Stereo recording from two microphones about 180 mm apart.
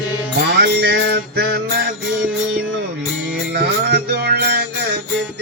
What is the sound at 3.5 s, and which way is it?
Music, 65° right (ahead or behind).